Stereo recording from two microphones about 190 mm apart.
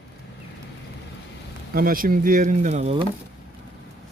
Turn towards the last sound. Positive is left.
turn(degrees=-35)  # may be behind; listen again after turning